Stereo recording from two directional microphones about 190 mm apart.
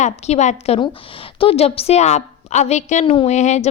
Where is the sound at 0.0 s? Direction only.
35° left (ahead or behind).